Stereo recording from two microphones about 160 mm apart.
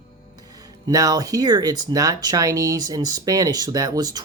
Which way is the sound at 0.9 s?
20° right (ahead or behind).